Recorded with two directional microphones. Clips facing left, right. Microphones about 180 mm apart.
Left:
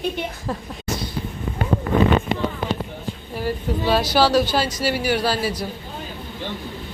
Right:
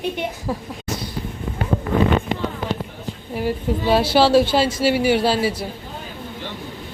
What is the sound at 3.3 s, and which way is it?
A woman's voice, 20° right (ahead or behind).